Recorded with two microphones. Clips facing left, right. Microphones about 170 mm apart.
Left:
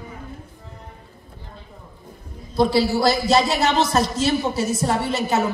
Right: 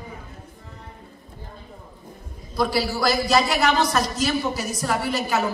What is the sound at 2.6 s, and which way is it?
A man's voice, 25° left (ahead or behind).